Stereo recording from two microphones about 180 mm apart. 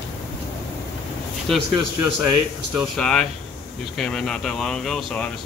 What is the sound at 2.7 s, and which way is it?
Speech, 5° left (ahead or behind).